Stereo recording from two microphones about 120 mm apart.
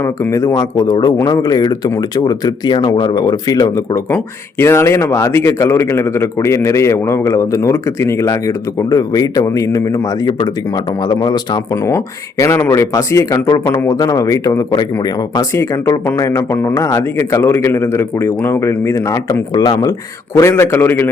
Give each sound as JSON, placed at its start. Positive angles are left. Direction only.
{"t": 0.0, "sound": "speech", "side_deg": 25}
{"t": 4.1, "sound": "speech", "side_deg": 20}
{"t": 11.9, "sound": "speech", "side_deg": 25}